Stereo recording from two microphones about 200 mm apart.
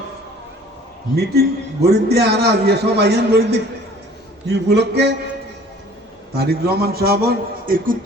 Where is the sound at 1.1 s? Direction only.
55° right (ahead or behind).